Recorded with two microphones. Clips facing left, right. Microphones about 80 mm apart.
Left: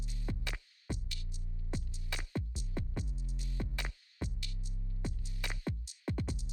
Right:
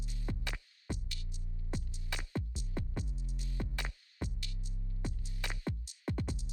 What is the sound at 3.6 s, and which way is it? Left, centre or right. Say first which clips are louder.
Music: even; right.